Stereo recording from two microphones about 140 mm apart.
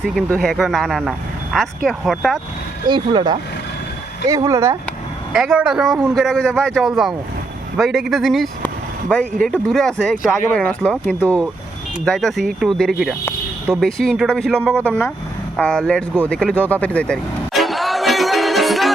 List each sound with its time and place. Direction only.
0.3 s speech: 5° left (ahead or behind)
2.8 s speech: 35° right (ahead or behind)
4.3 s speech: 25° right (ahead or behind)
5.3 s speech: centre (ahead or behind)
9.6 s speech: 5° left (ahead or behind)
15.5 s vehicle: 5° left (ahead or behind)